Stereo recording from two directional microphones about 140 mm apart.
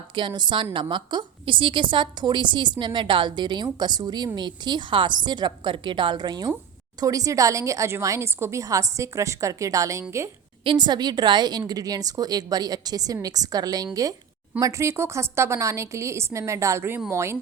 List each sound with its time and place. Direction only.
0.2 s a woman's voice: 35° right (ahead or behind)
10.6 s a woman's voice: 35° right (ahead or behind); by 17.3 s 20° right (ahead or behind)